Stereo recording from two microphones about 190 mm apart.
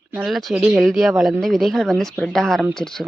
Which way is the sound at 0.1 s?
5° right (ahead or behind).